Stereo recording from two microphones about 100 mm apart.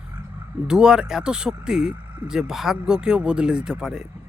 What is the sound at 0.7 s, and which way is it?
Speech, 5° right (ahead or behind).